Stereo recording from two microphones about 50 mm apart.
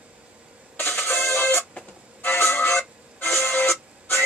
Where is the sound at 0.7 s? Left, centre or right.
Left.